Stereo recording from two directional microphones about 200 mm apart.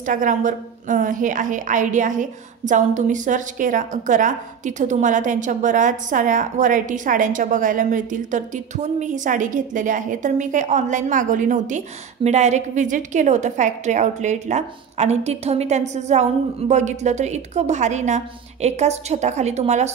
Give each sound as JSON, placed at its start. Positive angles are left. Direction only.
{"t": 0.0, "sound": "a woman's voice", "side_deg": -40}